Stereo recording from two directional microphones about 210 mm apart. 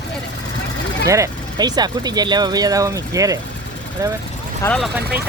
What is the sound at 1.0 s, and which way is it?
Speech, 15° right (ahead or behind).